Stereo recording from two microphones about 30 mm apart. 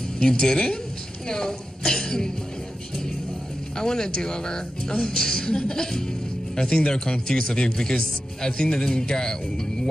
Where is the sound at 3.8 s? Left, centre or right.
Left.